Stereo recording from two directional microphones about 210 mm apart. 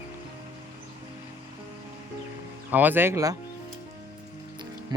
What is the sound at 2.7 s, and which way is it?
Speech, 10° right (ahead or behind).